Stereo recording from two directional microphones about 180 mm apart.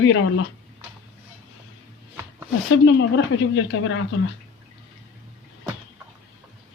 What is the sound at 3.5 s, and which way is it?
Speech, 90° left.